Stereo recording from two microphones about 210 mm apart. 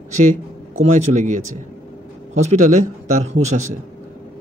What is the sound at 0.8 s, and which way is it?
Speech, 35° right (ahead or behind).